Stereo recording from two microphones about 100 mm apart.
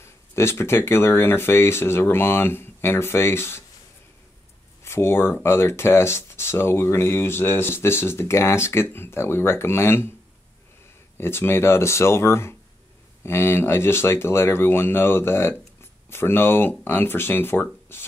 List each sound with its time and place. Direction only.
0.0 s speech: 25° left (ahead or behind)
4.8 s speech: 25° left (ahead or behind)
11.1 s speech: 25° left (ahead or behind)